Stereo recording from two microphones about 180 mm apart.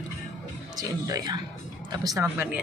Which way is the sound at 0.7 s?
20° right (ahead or behind).